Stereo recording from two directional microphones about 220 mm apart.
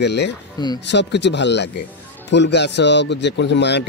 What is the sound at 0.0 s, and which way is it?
A man's voice, 50° left (ahead or behind).